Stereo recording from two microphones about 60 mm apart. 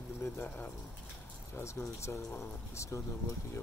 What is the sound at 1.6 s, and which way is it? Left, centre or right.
Speech, left.